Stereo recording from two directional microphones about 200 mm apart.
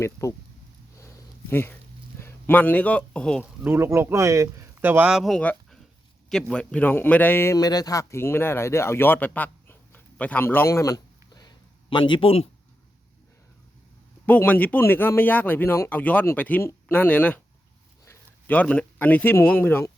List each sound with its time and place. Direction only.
0.0 s speech: 15° left (ahead or behind)
0.9 s a sound: 10° left (ahead or behind)
3.6 s a man's voice: 10° right (ahead or behind); by 12.5 s 30° left (ahead or behind)
14.3 s speech: 10° left (ahead or behind)